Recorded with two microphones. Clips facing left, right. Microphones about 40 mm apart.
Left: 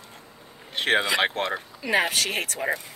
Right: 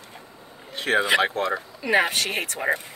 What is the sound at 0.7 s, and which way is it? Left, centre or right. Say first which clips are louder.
Speech: right 2 dB; left.